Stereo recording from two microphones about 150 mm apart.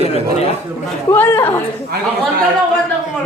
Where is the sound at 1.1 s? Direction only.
15° left (ahead or behind).